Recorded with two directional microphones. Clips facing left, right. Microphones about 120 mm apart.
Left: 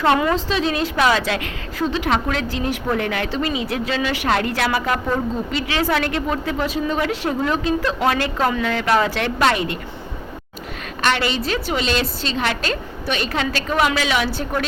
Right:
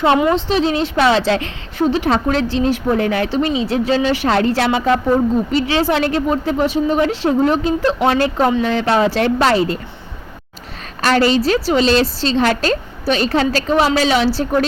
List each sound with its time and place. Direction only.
0.0 s a woman's voice: 25° right (ahead or behind)
11.0 s a woman's voice: 40° right (ahead or behind)